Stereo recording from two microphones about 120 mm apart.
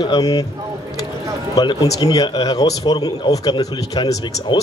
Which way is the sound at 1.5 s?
35° left (ahead or behind).